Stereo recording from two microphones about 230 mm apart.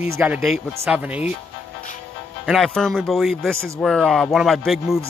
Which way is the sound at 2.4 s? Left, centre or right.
Centre.